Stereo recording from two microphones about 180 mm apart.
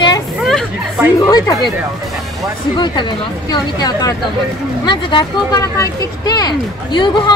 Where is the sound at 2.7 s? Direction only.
25° left (ahead or behind).